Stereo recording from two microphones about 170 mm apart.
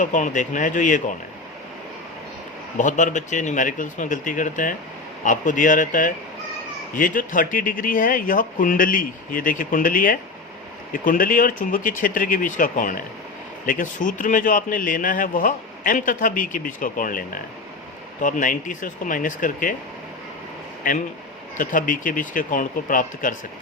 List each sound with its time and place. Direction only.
0.0 s a man's voice: 50° left (ahead or behind)
2.7 s a man's voice: 50° left (ahead or behind)
20.9 s a man's voice: 50° left (ahead or behind)